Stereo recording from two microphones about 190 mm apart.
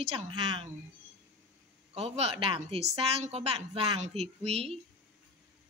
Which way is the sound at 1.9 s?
30° right (ahead or behind).